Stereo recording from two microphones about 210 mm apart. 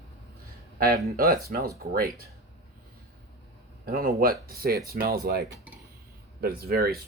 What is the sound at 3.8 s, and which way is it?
Speech, 45° right (ahead or behind).